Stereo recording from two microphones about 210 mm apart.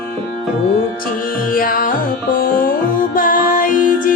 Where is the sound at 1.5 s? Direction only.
40° left (ahead or behind).